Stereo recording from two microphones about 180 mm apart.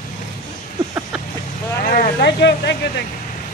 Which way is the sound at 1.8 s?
55° left (ahead or behind).